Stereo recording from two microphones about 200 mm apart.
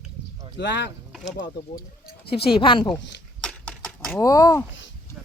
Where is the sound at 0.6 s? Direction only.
60° left (ahead or behind).